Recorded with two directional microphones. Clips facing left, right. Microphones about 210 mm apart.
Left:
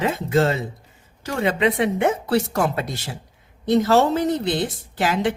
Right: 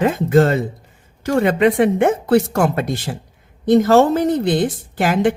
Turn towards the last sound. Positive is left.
turn(degrees=-50)  # may be behind; listen again after turning